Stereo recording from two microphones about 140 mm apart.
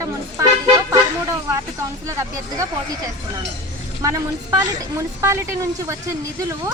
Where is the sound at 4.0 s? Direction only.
25° right (ahead or behind).